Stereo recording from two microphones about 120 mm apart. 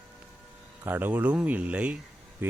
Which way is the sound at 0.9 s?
15° right (ahead or behind).